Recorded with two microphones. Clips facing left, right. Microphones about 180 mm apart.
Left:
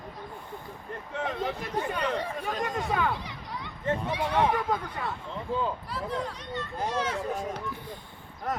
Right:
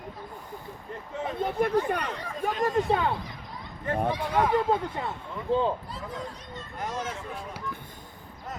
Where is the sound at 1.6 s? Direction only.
55° right (ahead or behind).